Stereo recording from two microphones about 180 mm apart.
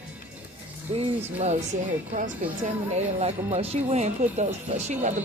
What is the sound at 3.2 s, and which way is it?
A woman's voice, 35° right (ahead or behind).